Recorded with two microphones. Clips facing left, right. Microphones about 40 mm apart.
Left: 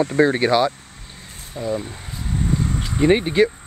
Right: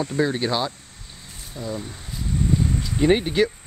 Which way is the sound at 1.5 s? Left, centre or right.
Left.